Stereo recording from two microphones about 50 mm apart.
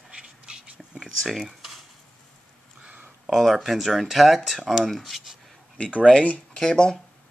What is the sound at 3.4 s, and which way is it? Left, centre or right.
Speech, centre.